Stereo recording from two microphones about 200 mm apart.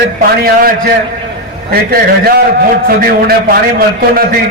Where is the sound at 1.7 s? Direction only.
50° right (ahead or behind).